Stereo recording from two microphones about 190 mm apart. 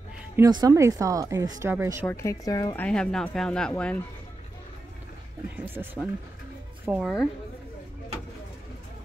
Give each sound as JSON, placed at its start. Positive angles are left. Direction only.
{"t": 0.4, "sound": "speech", "side_deg": -20}
{"t": 2.0, "sound": "speech", "side_deg": 15}
{"t": 5.6, "sound": "a woman's voice", "side_deg": -5}